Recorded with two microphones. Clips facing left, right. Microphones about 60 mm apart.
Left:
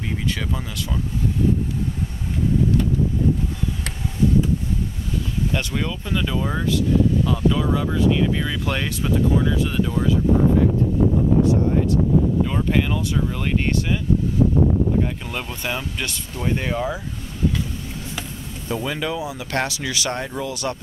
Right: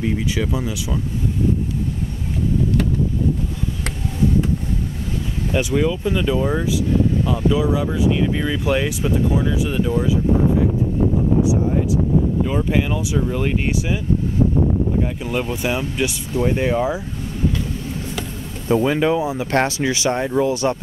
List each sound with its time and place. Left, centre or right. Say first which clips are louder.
0.0 s speech: right 5 dB; centre
5.5 s speech: right 11 dB; centre
12.4 s speech: right 2 dB; centre
15.2 s speech: right 6 dB; centre
18.7 s speech: right 8 dB; right